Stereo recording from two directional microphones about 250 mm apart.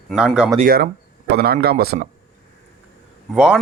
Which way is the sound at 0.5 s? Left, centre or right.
Right.